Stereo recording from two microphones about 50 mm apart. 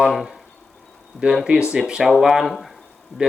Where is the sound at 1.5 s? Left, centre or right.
Right.